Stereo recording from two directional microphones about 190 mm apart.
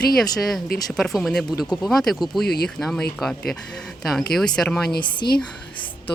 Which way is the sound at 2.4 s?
55° left (ahead or behind).